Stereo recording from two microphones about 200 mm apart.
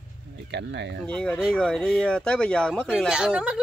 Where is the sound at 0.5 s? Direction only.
60° right (ahead or behind).